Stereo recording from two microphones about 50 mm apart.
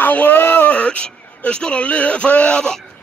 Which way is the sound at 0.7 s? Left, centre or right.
Left.